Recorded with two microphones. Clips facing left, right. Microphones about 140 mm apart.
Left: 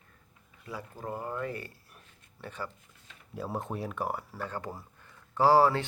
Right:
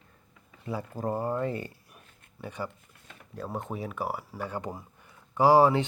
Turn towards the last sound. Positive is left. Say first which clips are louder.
# right 3 dB
turn(degrees=-15)  # may be behind; listen again after turning